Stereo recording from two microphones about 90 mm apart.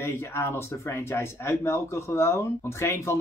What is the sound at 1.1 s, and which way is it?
Speech, 30° left (ahead or behind).